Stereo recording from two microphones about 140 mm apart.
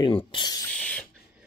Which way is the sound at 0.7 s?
10° left (ahead or behind).